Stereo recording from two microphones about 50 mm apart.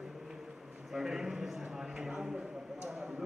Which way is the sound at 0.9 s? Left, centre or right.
Centre.